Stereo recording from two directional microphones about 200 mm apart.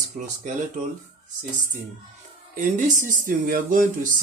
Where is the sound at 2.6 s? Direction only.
40° right (ahead or behind).